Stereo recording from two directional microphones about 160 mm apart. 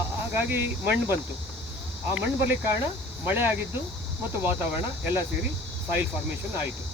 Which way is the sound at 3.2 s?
15° right (ahead or behind).